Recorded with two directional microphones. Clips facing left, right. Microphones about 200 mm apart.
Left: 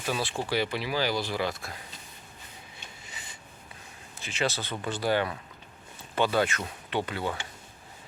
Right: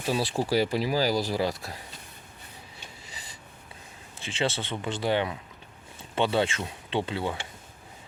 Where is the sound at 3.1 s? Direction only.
35° right (ahead or behind).